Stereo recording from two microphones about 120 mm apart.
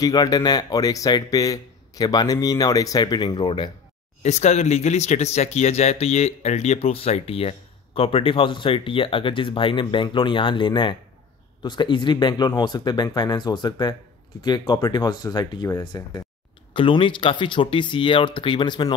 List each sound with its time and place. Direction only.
0.0 s speech: 30° left (ahead or behind)
4.2 s speech: 70° left (ahead or behind); by 18.9 s 40° left (ahead or behind)